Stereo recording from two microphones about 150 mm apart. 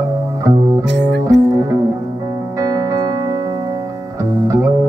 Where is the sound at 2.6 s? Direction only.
25° right (ahead or behind).